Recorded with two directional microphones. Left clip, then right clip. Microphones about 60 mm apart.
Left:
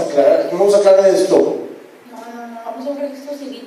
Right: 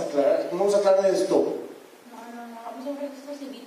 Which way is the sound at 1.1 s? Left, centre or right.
Centre.